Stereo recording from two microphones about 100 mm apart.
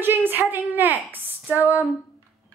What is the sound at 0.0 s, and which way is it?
A woman's voice, 20° right (ahead or behind).